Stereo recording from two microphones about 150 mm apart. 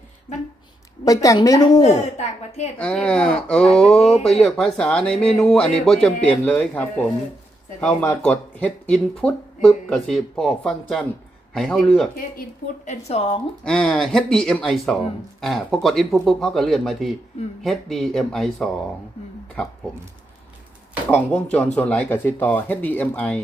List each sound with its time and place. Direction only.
1.0 s a woman's voice: 25° left (ahead or behind)
1.8 s a woman's voice: 50° left (ahead or behind)
2.7 s speech: 5° left (ahead or behind)
8.2 s speech: 10° left (ahead or behind)
12.8 s a woman's voice: 50° left (ahead or behind)
13.7 s speech: 5° left (ahead or behind)
21.1 s speech: 10° left (ahead or behind)